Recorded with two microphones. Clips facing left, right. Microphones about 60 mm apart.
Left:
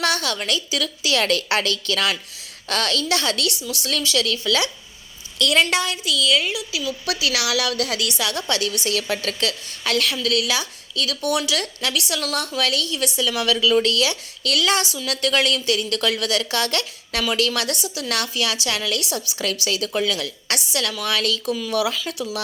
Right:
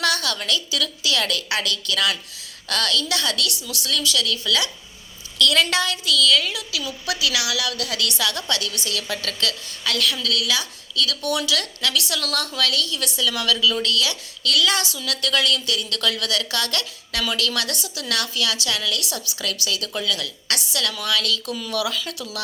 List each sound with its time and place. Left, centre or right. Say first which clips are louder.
0.0 s a woman's voice: left 1 dB; left
5.4 s a woman's voice: left 1 dB; left
7.9 s a woman's voice: even; centre